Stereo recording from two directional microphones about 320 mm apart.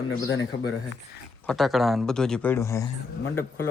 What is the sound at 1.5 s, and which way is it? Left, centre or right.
A man's voice, centre.